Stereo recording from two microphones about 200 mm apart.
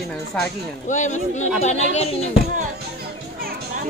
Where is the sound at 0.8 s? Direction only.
40° left (ahead or behind).